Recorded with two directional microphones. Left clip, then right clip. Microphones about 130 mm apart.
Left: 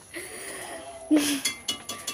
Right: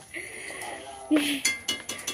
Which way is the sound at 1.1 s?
40° left (ahead or behind).